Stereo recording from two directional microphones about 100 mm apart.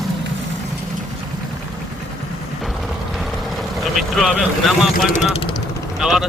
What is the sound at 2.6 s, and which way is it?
Vehicle, centre (ahead or behind).